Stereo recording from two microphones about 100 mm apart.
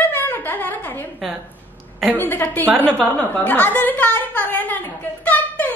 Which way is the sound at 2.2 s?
20° left (ahead or behind).